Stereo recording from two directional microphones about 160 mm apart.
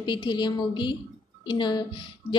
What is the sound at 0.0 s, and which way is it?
A woman's voice, 30° left (ahead or behind).